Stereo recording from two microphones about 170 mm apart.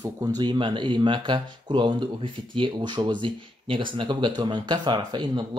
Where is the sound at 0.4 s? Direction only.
30° right (ahead or behind).